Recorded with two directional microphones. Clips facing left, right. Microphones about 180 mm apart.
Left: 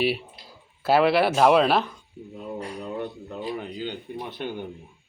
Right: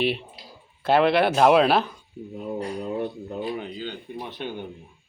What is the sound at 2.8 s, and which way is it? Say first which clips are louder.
Speech: right 3 dB; 20° right (ahead or behind).